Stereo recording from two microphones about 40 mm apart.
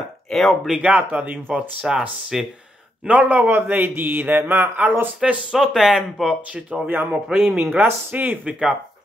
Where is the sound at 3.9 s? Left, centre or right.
Right.